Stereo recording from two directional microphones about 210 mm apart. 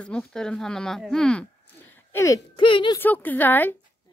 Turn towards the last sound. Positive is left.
turn(degrees=10)  # may be behind; listen again after turning